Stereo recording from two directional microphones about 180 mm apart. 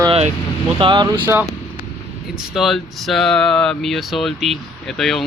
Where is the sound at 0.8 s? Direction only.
25° right (ahead or behind).